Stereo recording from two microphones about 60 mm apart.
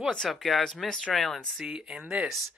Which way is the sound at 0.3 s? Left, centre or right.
Centre.